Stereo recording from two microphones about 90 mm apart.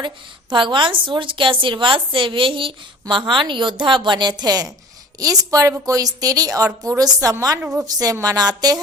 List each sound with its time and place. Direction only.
0.5 s a woman's voice: 65° right (ahead or behind); by 7.6 s 40° right (ahead or behind)
7.6 s a woman's voice: 10° right (ahead or behind)
7.9 s a woman's voice: 40° right (ahead or behind)